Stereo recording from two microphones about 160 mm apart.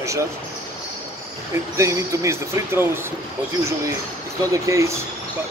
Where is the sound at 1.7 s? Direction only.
20° right (ahead or behind).